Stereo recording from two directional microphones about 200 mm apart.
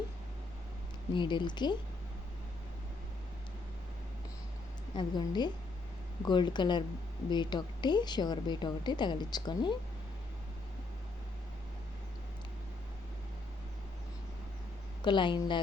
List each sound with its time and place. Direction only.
1.1 s a woman's voice: 25° left (ahead or behind)
4.9 s a woman's voice: 20° left (ahead or behind)
15.0 s a woman's voice: 25° left (ahead or behind)